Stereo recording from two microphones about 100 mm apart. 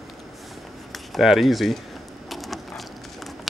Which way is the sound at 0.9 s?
Centre (ahead or behind).